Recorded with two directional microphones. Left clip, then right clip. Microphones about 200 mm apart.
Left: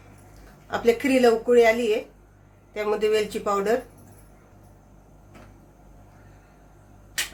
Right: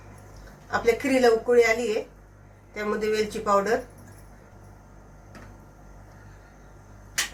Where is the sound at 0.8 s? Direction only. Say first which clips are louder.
Left 2 dB; 35° left (ahead or behind).